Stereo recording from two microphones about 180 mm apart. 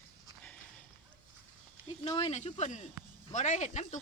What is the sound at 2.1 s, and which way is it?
Speech, 35° left (ahead or behind).